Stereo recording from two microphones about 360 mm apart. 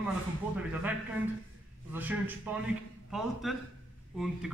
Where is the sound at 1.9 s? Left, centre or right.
Centre.